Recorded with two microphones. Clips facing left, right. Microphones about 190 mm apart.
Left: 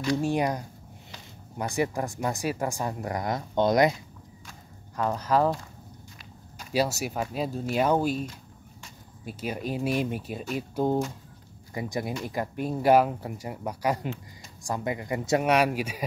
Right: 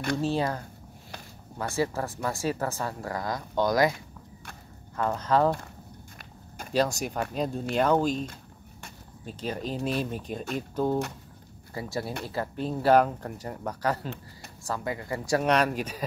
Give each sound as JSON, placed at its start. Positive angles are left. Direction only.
{"t": 0.2, "sound": "speech", "side_deg": 15}
{"t": 4.9, "sound": "speech", "side_deg": 15}
{"t": 6.7, "sound": "speech", "side_deg": 10}
{"t": 15.4, "sound": "speech", "side_deg": 10}